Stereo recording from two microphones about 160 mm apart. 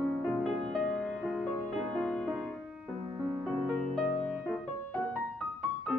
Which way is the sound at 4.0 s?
Centre (ahead or behind).